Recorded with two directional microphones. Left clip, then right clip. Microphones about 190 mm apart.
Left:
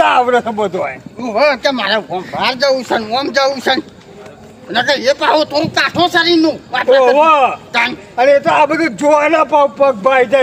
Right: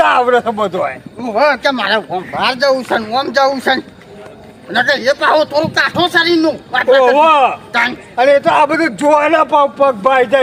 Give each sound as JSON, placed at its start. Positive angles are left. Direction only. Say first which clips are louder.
{"t": 0.0, "sound": "speech", "louder": "even", "side_deg": -15}
{"t": 1.2, "sound": "speech", "louder": "even", "side_deg": 15}
{"t": 7.0, "sound": "speech", "louder": "even", "side_deg": -20}
{"t": 7.7, "sound": "a woman's voice", "louder": "even", "side_deg": 25}
{"t": 8.1, "sound": "a man's voice", "louder": "even", "side_deg": -15}